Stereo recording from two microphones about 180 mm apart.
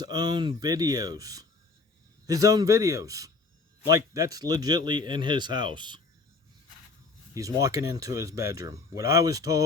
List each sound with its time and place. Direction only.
0.0 s speech: 20° right (ahead or behind)
7.3 s speech: 20° right (ahead or behind)